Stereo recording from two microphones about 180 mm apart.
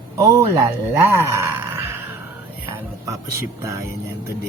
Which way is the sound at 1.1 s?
15° right (ahead or behind).